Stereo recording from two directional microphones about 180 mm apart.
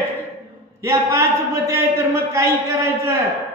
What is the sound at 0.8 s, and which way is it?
Speech, 15° right (ahead or behind).